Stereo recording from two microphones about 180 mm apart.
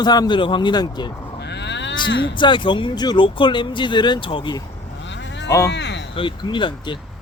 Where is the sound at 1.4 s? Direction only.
70° left (ahead or behind).